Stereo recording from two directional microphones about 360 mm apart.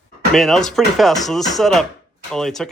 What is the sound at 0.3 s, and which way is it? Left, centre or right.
Speech, centre.